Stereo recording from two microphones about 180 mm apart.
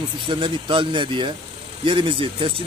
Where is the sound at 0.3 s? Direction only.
30° right (ahead or behind).